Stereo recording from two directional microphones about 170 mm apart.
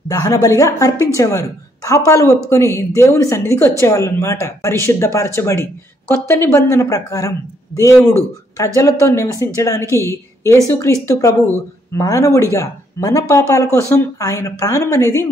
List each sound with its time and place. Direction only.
0.1 s speech: 20° left (ahead or behind)